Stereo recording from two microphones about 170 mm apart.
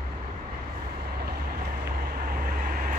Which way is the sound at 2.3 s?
60° right (ahead or behind).